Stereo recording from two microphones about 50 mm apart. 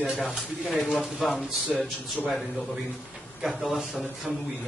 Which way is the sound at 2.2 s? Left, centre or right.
Centre.